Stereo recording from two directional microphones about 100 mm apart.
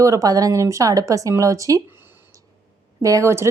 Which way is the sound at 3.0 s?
30° right (ahead or behind).